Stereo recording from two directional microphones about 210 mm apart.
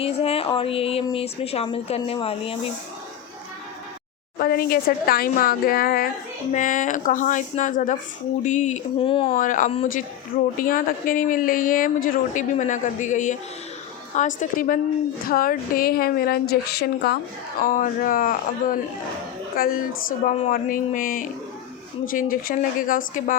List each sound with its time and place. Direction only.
0.0 s speech: 30° left (ahead or behind)
4.4 s a woman's voice: 45° left (ahead or behind); by 9.3 s 25° left (ahead or behind)
9.3 s a woman's voice: 40° left (ahead or behind)